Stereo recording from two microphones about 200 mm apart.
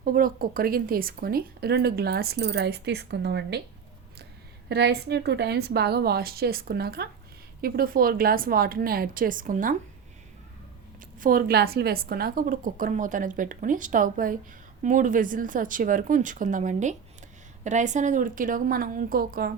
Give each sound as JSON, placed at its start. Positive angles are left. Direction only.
{"t": 0.0, "sound": "speech", "side_deg": -45}
{"t": 4.7, "sound": "speech", "side_deg": -55}
{"t": 11.2, "sound": "a woman's voice", "side_deg": -45}